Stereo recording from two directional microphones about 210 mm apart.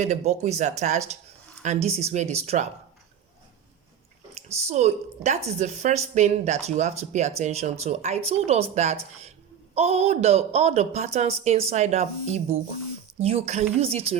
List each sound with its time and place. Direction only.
0.0 s speech: 35° right (ahead or behind)
4.4 s a woman's voice: 30° right (ahead or behind)